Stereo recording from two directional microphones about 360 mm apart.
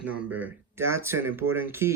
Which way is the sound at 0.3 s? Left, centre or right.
Centre.